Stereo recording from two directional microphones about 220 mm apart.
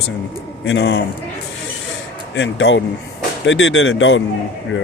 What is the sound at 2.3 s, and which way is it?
Speech, 55° left (ahead or behind).